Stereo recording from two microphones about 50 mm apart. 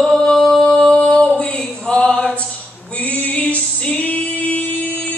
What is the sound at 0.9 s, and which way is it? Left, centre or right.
Music, centre.